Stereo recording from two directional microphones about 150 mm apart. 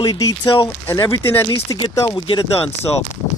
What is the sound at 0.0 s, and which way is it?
Speech, 20° left (ahead or behind).